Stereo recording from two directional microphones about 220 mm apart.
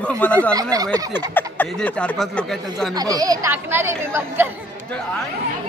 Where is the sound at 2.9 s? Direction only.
15° right (ahead or behind).